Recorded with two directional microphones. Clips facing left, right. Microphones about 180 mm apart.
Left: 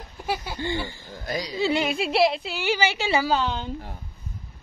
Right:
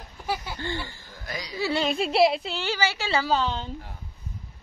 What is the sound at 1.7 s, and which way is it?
Speech, 15° left (ahead or behind).